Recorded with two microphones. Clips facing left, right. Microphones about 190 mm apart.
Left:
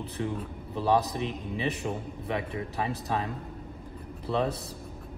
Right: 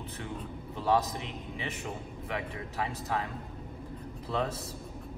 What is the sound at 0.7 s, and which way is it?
A man's voice, 35° left (ahead or behind).